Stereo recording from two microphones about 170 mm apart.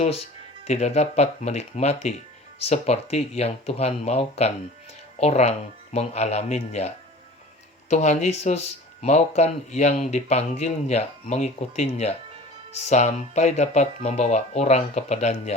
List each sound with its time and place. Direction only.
0.7 s speech: 40° left (ahead or behind)